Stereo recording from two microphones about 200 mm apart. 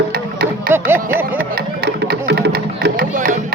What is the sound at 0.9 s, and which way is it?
Music, 45° right (ahead or behind).